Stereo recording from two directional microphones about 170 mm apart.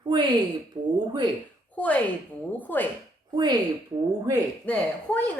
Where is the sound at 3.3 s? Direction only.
25° right (ahead or behind).